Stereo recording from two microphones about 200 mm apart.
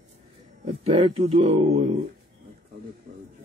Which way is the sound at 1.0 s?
30° right (ahead or behind).